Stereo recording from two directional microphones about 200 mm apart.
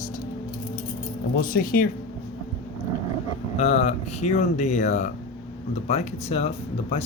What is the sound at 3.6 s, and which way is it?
Speech, 35° left (ahead or behind).